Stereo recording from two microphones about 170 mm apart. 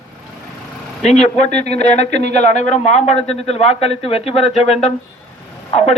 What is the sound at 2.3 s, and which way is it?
A man's voice, 45° left (ahead or behind).